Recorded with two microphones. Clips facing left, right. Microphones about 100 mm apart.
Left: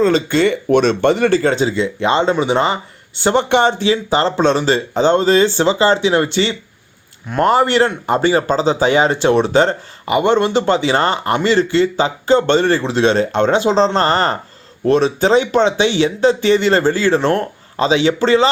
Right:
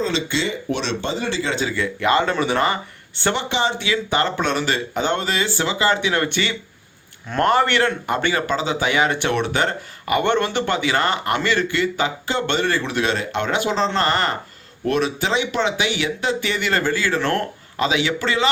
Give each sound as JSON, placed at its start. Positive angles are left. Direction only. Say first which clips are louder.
{"t": 0.1, "sound": "speech", "louder": "left 9 dB", "side_deg": 50}
{"t": 1.5, "sound": "speech", "louder": "left 6 dB", "side_deg": 25}
{"t": 3.3, "sound": "speech", "louder": "left 11 dB", "side_deg": 50}
{"t": 3.8, "sound": "speech", "louder": "left 6 dB", "side_deg": 30}